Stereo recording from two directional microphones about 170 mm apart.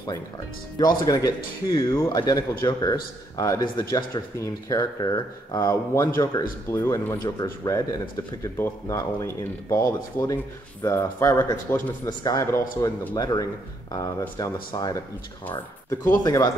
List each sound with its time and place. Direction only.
0.7 s speech: 25° left (ahead or behind)